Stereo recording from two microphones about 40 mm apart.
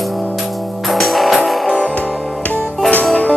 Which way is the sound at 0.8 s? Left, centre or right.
Centre.